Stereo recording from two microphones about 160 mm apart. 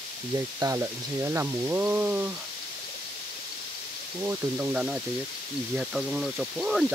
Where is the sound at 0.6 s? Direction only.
20° right (ahead or behind).